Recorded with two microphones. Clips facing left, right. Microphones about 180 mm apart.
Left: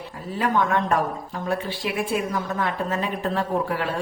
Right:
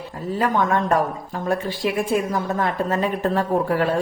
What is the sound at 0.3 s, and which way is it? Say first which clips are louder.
Speech: right 2 dB; 40° right (ahead or behind).